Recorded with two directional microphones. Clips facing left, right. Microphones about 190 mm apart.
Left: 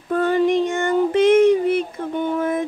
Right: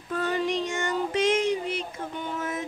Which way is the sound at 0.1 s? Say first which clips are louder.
Left 9 dB; 55° left (ahead or behind).